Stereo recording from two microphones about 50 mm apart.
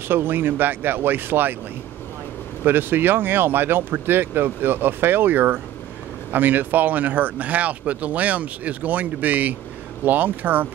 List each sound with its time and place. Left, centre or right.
0.1 s speech: right
2.6 s speech: right